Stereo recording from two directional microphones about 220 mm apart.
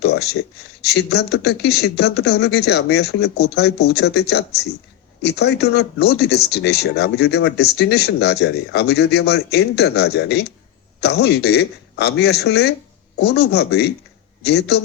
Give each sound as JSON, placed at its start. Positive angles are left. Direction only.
{"t": 0.0, "sound": "speech", "side_deg": 50}